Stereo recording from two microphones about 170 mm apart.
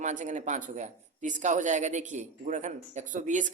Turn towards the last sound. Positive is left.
turn(degrees=-45)  # may be behind; listen again after turning